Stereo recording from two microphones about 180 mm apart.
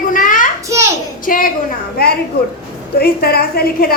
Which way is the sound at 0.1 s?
45° left (ahead or behind).